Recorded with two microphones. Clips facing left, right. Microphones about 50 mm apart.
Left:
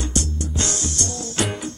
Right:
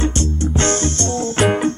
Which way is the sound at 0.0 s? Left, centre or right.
Right.